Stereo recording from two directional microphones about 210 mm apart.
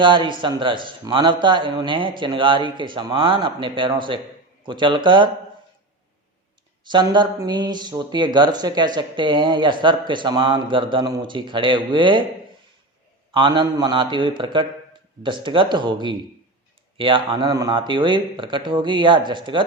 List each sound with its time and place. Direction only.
0.0 s speech: 25° right (ahead or behind)
6.8 s speech: 20° right (ahead or behind)
13.3 s speech: 20° right (ahead or behind)